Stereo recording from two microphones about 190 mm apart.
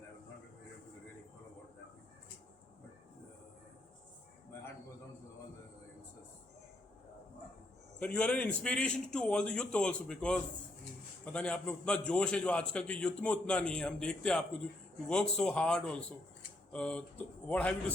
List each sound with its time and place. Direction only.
7.9 s a man's voice: 5° left (ahead or behind)